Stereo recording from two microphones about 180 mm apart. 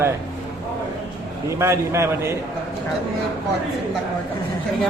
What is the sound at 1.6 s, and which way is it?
Speech, 15° right (ahead or behind).